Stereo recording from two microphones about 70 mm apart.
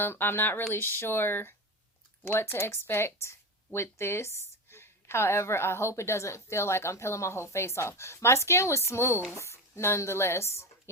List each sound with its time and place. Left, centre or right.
0.0 s a woman's voice: left